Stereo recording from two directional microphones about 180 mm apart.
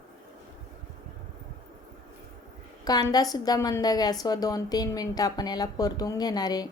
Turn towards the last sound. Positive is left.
turn(degrees=20)  # may be behind; listen again after turning